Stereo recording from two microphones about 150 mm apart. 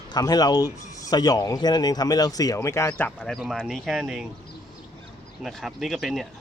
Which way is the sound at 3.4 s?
Centre (ahead or behind).